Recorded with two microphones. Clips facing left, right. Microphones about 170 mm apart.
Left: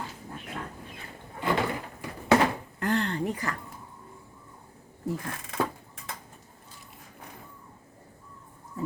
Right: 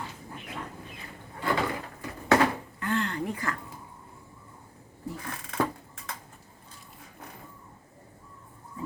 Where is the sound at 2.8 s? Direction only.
35° left (ahead or behind).